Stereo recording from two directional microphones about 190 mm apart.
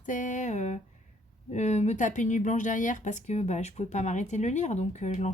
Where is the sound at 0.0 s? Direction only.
45° left (ahead or behind).